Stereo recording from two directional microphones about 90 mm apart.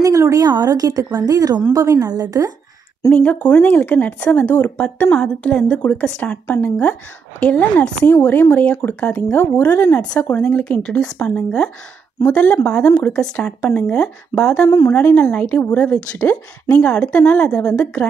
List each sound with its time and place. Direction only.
0.0 s a woman's voice: 40° right (ahead or behind)
3.1 s a woman's voice: 20° left (ahead or behind)
10.3 s a woman's voice: 15° left (ahead or behind)